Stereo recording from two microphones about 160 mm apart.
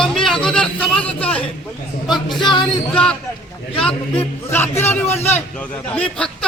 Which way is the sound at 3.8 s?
10° left (ahead or behind).